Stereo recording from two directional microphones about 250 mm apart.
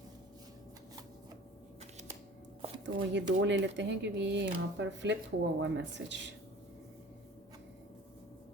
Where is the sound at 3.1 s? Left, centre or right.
Right.